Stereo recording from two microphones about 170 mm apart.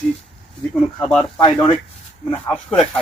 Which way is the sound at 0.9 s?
10° left (ahead or behind).